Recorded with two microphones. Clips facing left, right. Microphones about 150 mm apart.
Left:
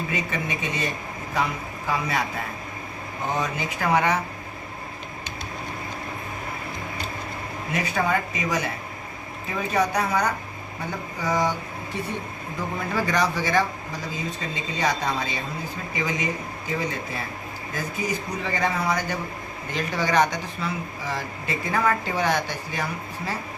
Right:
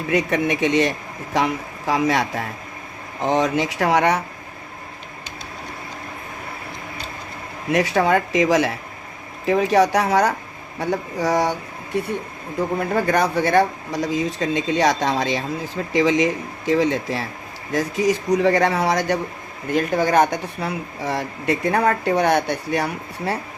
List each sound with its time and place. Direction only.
0.1 s a man's voice: 70° right (ahead or behind)
7.7 s speech: 80° right
10.8 s speech: 75° right (ahead or behind)
12.9 s speech: 55° right (ahead or behind); by 18.2 s 90° right
18.4 s speech: 75° right (ahead or behind)
19.7 s speech: 50° right (ahead or behind); by 23.4 s 70° right (ahead or behind)